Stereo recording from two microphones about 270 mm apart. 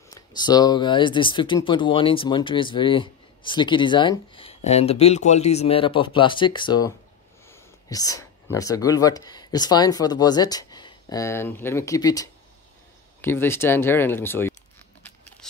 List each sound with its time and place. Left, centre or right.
0.1 s speech: centre